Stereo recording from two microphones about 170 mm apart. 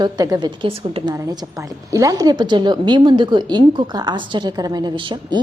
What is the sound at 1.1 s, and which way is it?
A woman's voice, 15° right (ahead or behind).